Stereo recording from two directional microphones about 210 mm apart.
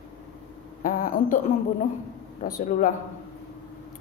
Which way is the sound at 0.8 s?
40° left (ahead or behind).